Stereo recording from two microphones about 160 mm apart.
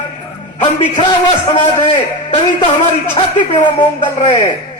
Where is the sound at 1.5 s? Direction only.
50° left (ahead or behind).